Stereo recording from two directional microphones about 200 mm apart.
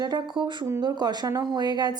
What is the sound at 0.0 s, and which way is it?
Speech, 20° right (ahead or behind).